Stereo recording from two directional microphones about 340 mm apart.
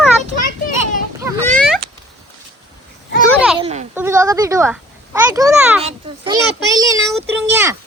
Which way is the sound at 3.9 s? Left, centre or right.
Centre.